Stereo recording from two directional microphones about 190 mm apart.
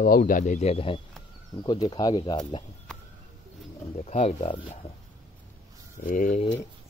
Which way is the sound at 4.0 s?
35° left (ahead or behind).